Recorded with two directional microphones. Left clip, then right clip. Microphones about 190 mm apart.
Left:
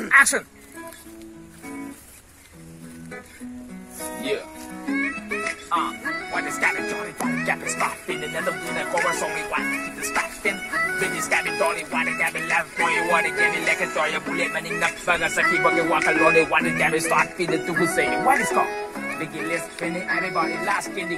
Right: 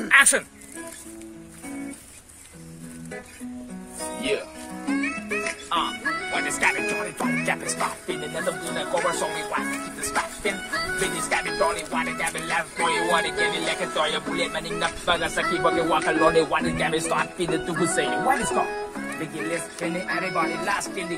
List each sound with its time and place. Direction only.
4.0 s music: 35° right (ahead or behind)
7.6 s speech: 5° right (ahead or behind)
8.4 s speech: 5° left (ahead or behind)
19.8 s speech: 15° right (ahead or behind)